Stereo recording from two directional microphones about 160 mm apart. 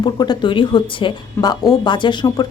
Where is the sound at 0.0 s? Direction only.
25° left (ahead or behind).